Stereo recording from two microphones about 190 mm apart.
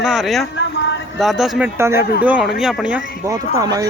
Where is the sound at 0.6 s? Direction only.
70° left (ahead or behind).